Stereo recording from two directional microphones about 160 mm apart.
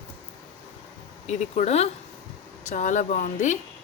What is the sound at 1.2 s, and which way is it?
Speech, 45° left (ahead or behind).